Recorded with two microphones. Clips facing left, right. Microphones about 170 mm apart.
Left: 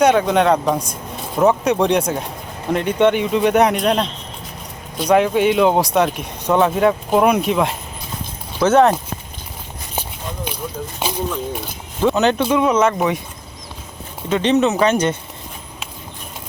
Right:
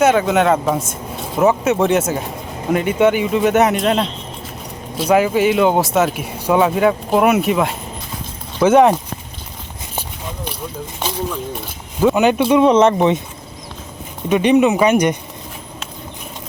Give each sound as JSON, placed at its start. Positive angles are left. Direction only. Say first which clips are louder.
{"t": 0.0, "sound": "speech", "louder": "even", "side_deg": 0}
{"t": 11.9, "sound": "speech", "louder": "right 2 dB", "side_deg": -10}
{"t": 12.5, "sound": "speech", "louder": "right 4 dB", "side_deg": -25}
{"t": 14.3, "sound": "speech", "louder": "right 3 dB", "side_deg": -15}